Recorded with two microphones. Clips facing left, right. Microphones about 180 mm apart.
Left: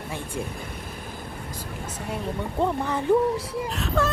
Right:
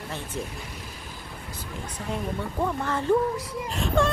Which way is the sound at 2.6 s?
15° left (ahead or behind).